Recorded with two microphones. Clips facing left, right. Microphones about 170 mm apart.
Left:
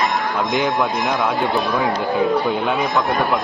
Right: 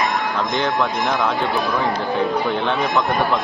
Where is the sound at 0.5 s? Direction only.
15° left (ahead or behind).